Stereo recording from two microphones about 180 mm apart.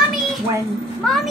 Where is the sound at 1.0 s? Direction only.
5° left (ahead or behind).